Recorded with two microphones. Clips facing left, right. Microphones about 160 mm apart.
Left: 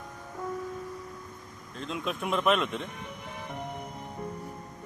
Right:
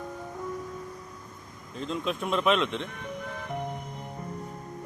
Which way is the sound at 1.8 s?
Centre (ahead or behind).